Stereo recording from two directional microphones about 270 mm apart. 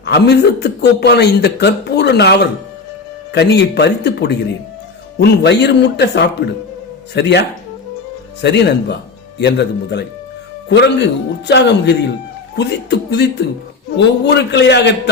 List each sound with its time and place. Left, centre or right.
0.0 s speech: left